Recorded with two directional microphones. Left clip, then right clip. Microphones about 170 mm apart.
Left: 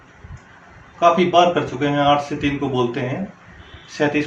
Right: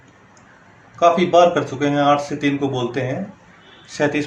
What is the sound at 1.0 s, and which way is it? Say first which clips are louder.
Speech: right 1 dB; 50° right (ahead or behind).